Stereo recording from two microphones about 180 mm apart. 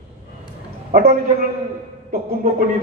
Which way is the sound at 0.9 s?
55° right (ahead or behind).